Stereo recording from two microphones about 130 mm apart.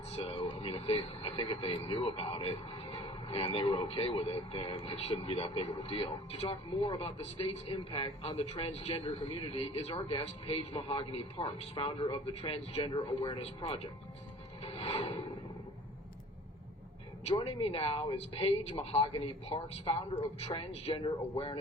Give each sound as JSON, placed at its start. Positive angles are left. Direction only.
{"t": 0.1, "sound": "speech", "side_deg": 45}
{"t": 14.6, "sound": "a sound", "side_deg": 45}
{"t": 17.2, "sound": "speech", "side_deg": 45}
{"t": 19.5, "sound": "speech", "side_deg": 50}